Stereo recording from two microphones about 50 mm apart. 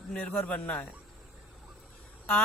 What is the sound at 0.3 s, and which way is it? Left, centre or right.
Speech, left.